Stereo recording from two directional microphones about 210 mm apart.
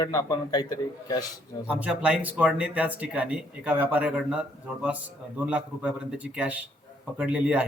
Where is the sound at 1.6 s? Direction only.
5° right (ahead or behind).